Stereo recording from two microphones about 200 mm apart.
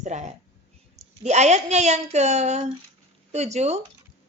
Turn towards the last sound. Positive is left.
turn(degrees=-35)  # may be behind; listen again after turning